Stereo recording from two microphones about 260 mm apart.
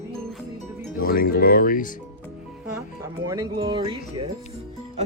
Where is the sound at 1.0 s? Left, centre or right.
Left.